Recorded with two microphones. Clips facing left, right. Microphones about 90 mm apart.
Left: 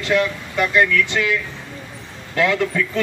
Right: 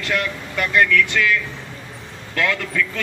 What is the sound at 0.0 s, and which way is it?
A man's voice, 20° left (ahead or behind).